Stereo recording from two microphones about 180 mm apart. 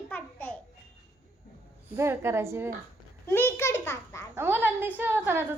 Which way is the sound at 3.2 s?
15° left (ahead or behind).